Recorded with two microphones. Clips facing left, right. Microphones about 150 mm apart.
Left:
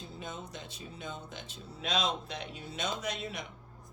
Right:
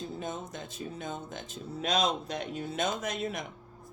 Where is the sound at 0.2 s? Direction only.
45° right (ahead or behind).